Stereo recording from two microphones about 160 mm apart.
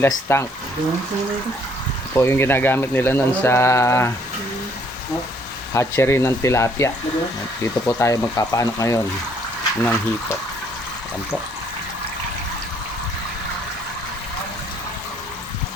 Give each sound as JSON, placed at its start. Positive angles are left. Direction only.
{"t": 0.0, "sound": "speech", "side_deg": 15}
{"t": 2.1, "sound": "speech", "side_deg": 15}
{"t": 5.7, "sound": "speech", "side_deg": 15}